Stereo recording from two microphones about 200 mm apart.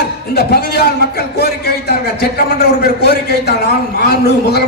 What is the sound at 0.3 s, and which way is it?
A man's voice, 50° left (ahead or behind).